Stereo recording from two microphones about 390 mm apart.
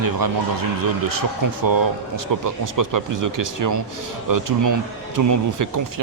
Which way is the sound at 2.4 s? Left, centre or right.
Right.